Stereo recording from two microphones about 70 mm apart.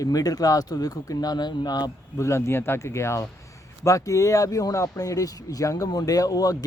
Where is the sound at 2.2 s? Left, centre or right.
Left.